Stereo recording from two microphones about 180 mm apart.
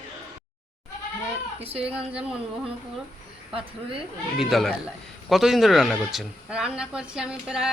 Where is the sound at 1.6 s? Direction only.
30° right (ahead or behind).